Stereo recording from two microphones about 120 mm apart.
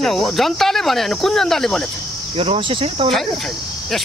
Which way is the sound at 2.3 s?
50° right (ahead or behind).